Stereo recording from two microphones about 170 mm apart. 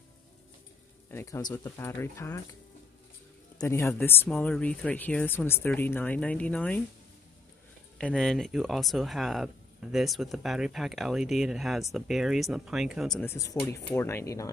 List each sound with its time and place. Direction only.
1.1 s speech: 20° left (ahead or behind)
3.5 s speech: 15° left (ahead or behind)
8.0 s speech: 5° left (ahead or behind)
13.2 s speech: 15° left (ahead or behind)